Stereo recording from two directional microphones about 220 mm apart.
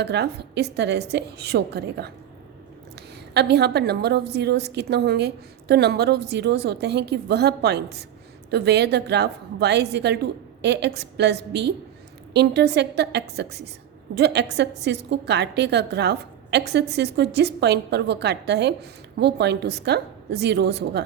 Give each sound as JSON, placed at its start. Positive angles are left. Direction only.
{"t": 0.0, "sound": "a woman's voice", "side_deg": -50}
{"t": 3.3, "sound": "a woman's voice", "side_deg": -50}